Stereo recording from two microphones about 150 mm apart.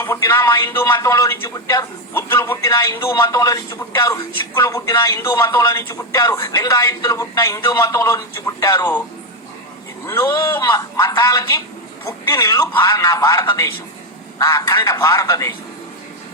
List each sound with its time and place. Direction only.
0.0 s speech: 15° left (ahead or behind)
3.2 s speech: 25° left (ahead or behind)
10.1 s speech: 15° left (ahead or behind)